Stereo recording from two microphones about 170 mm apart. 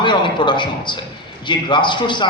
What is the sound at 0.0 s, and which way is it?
A man's voice, 30° left (ahead or behind).